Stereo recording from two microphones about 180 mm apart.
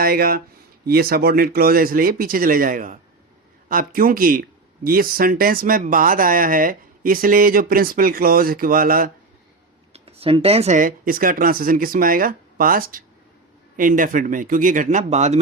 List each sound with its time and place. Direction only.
0.0 s speech: 55° right (ahead or behind)
9.9 s speech: 35° right (ahead or behind)